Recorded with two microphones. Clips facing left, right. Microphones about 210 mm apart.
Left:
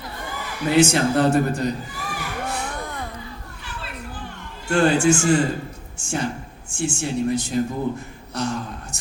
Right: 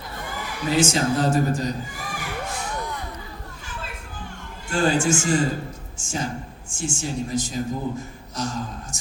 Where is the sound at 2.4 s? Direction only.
50° left (ahead or behind).